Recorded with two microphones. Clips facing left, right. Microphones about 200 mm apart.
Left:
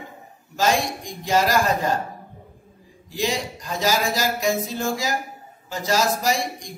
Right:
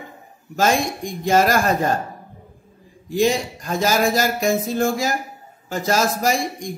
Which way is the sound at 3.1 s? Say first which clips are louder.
Right 6 dB; 50° right (ahead or behind).